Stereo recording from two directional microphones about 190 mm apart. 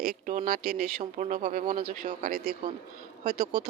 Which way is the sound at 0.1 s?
45° right (ahead or behind).